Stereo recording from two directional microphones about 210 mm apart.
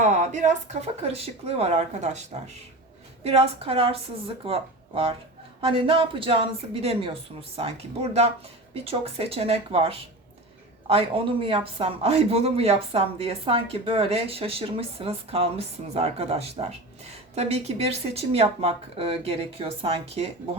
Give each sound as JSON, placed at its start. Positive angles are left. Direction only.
{"t": 0.0, "sound": "speech", "side_deg": -35}